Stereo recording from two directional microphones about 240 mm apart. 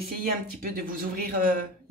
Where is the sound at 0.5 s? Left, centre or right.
Right.